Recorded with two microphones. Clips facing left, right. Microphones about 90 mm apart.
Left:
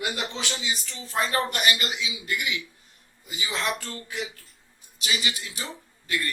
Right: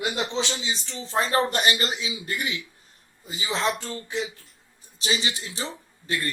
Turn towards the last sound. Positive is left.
turn(degrees=-30)  # may be behind; listen again after turning